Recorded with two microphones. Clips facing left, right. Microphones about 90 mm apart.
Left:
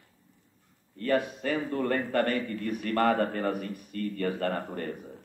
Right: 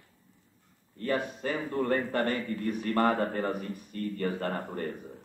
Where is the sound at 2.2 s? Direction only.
55° left (ahead or behind).